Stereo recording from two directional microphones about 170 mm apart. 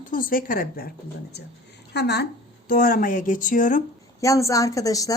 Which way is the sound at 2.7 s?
55° left (ahead or behind).